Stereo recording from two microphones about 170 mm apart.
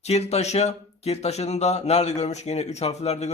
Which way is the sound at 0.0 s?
40° left (ahead or behind).